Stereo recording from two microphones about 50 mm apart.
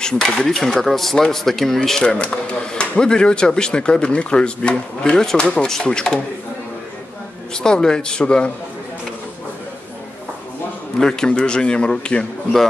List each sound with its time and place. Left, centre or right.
0.0 s speech: centre
1.9 s speech: centre
7.5 s speech: centre
11.0 s a man's voice: centre